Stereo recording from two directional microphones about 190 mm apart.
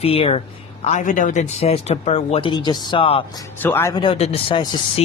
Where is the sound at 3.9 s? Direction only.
25° left (ahead or behind).